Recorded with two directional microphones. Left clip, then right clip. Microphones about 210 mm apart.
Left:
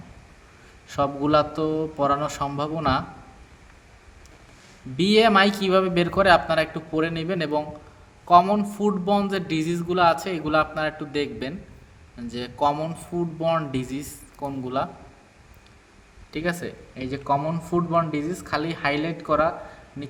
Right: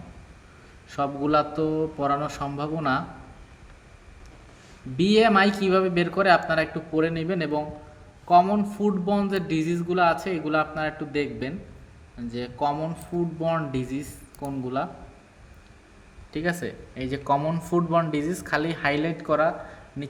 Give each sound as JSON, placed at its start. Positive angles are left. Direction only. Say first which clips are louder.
{"t": 0.9, "sound": "a man's voice", "louder": "left 3 dB", "side_deg": 25}
{"t": 4.9, "sound": "a man's voice", "louder": "left 2 dB", "side_deg": 20}
{"t": 16.3, "sound": "speech", "louder": "even", "side_deg": 10}